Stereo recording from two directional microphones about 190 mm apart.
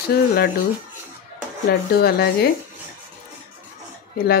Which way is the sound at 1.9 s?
55° left (ahead or behind).